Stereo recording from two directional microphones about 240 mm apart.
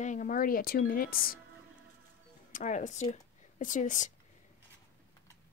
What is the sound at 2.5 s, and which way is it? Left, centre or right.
Speech, left.